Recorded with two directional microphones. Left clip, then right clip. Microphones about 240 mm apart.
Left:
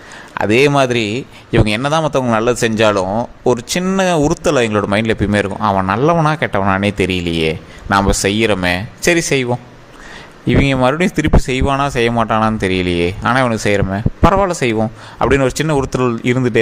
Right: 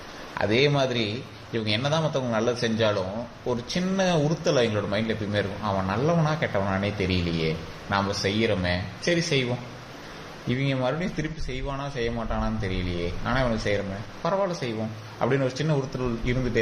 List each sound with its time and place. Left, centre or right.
0.3 s speech: left
10.5 s speech: left